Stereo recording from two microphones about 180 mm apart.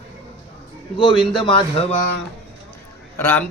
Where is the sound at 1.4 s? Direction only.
30° left (ahead or behind).